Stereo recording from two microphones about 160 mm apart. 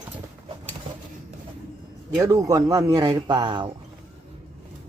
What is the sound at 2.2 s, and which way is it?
Speech, 20° right (ahead or behind).